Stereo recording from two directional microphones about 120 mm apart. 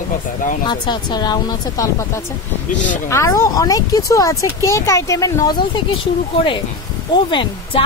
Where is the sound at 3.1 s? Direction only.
25° left (ahead or behind).